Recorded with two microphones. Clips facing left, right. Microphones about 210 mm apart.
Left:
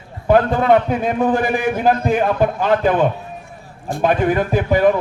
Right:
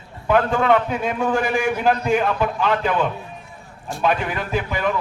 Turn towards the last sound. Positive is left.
turn(degrees=40)  # may be behind; listen again after turning